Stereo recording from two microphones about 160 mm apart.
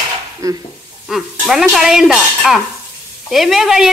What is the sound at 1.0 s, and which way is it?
Speech, centre (ahead or behind).